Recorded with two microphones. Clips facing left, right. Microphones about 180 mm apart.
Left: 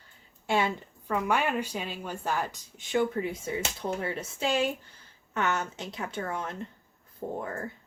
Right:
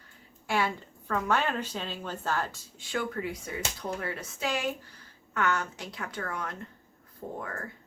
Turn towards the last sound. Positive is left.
turn(degrees=25)  # may be behind; listen again after turning